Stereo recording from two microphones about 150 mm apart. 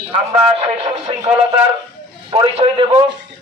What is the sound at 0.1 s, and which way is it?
A man's voice, 40° right (ahead or behind).